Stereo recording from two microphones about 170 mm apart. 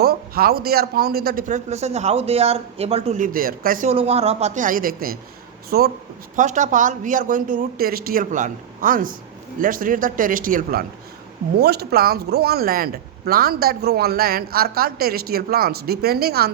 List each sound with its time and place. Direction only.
0.0 s a man's voice: 65° right (ahead or behind); by 3.2 s 40° right (ahead or behind)
3.3 s speech: 60° right (ahead or behind)
3.8 s a woman's voice: 35° right (ahead or behind); by 5.9 s 65° right (ahead or behind)
6.3 s a man's voice: 45° right (ahead or behind)
11.6 s speech: 70° right (ahead or behind)